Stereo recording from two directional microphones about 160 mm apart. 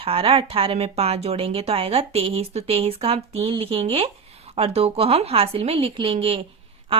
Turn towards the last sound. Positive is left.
turn(degrees=-35)  # may be behind; listen again after turning